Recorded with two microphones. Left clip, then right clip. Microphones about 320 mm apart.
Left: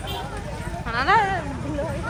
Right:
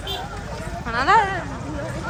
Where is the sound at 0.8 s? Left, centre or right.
Centre.